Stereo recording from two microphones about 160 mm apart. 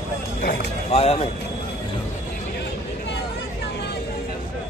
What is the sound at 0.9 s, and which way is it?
Vehicle, 40° left (ahead or behind).